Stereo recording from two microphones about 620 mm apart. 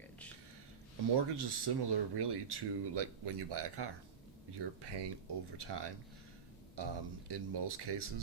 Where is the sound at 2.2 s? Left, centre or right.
Right.